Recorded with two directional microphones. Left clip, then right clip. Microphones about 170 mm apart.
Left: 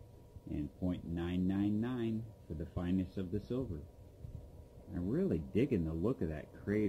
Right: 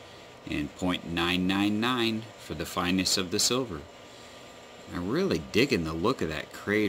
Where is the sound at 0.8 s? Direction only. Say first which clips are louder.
Right 14 dB; 30° right (ahead or behind).